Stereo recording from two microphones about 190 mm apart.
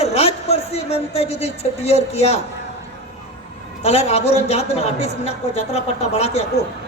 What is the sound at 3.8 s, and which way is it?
A man's voice, 35° left (ahead or behind).